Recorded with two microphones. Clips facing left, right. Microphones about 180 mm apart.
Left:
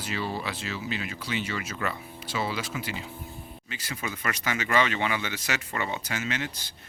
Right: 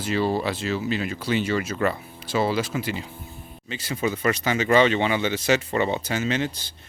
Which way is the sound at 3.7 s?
30° right (ahead or behind).